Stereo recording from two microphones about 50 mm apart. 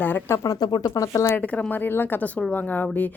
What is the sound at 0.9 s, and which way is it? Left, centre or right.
Speech, left.